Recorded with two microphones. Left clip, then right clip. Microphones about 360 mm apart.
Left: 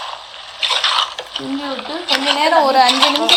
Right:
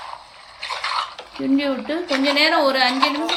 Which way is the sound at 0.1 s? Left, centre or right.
Left.